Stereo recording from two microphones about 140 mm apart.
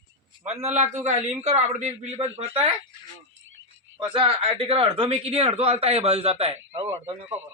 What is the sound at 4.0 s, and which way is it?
Speech, 35° right (ahead or behind).